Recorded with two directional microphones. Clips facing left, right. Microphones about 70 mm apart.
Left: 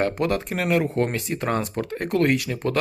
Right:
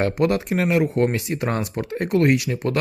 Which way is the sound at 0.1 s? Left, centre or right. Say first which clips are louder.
Right 4 dB; right.